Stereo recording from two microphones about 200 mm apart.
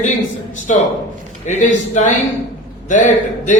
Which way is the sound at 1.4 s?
40° left (ahead or behind).